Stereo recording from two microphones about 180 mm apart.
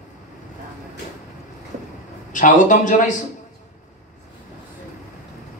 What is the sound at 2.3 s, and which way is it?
Speech, 45° left (ahead or behind).